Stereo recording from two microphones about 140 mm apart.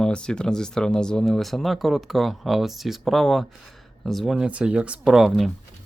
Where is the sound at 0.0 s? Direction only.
5° left (ahead or behind).